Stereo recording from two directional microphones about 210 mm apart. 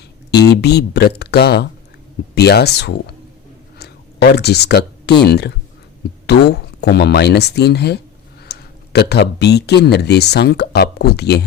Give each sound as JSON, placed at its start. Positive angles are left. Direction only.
{"t": 0.3, "sound": "speech", "side_deg": 50}